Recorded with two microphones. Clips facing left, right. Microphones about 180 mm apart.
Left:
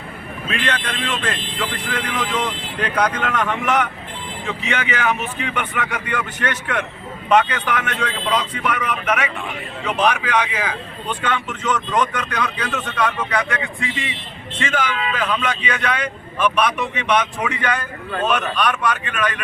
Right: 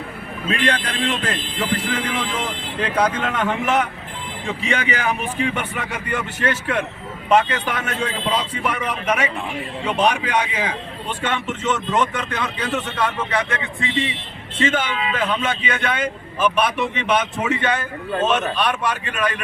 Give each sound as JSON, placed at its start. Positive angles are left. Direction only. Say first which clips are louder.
{"t": 0.6, "sound": "speech", "louder": "right 4 dB", "side_deg": -35}